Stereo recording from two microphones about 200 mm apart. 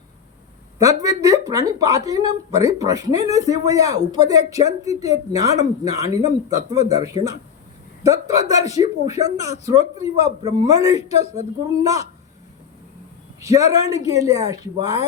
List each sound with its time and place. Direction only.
0.8 s speech: 15° right (ahead or behind)
2.5 s speech: 30° left (ahead or behind)
2.7 s speech: 15° right (ahead or behind)
8.3 s speech: 15° right (ahead or behind)
13.4 s speech: 15° right (ahead or behind)